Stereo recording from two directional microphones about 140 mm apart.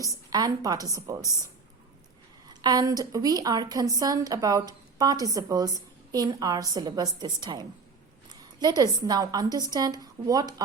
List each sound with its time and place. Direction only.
0.0 s a woman's voice: 25° right (ahead or behind)
2.5 s a woman's voice: 30° right (ahead or behind)